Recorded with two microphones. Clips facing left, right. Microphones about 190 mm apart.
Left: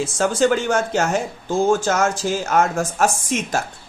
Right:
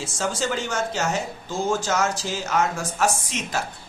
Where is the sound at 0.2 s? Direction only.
60° left (ahead or behind).